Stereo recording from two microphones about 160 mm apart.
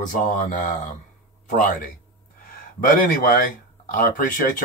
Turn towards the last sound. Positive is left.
turn(degrees=60)  # may be behind; listen again after turning